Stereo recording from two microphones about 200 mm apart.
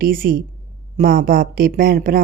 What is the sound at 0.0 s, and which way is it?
A woman's voice, 45° right (ahead or behind).